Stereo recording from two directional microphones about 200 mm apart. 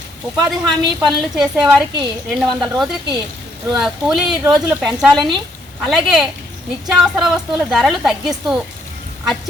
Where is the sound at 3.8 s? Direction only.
Centre (ahead or behind).